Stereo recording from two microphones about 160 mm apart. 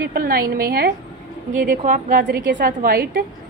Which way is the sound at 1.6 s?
55° right (ahead or behind).